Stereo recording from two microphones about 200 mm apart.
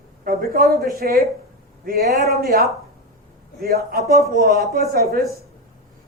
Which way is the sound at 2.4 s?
45° right (ahead or behind).